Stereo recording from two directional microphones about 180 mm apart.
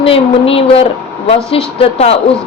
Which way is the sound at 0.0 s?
30° left (ahead or behind).